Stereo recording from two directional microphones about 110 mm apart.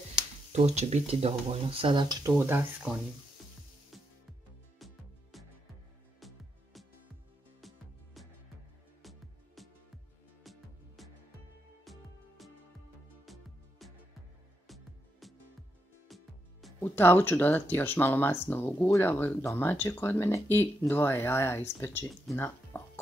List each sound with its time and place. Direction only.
0.5 s speech: 80° right; by 2.1 s 45° right (ahead or behind)
2.2 s speech: 20° right (ahead or behind)
2.9 s speech: 10° right (ahead or behind)
3.9 s music: centre (ahead or behind)
9.6 s music: centre (ahead or behind)
16.8 s speech: 20° left (ahead or behind)
22.7 s a sound: 15° left (ahead or behind)